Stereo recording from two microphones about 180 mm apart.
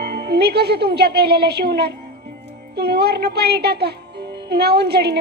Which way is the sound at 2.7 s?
65° right (ahead or behind).